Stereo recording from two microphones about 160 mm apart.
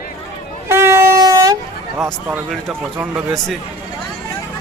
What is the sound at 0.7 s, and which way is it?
Vehicle, 15° right (ahead or behind).